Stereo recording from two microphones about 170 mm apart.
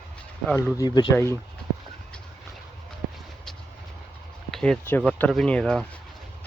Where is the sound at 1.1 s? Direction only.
15° left (ahead or behind).